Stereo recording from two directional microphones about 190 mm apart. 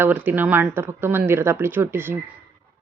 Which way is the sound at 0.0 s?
10° right (ahead or behind).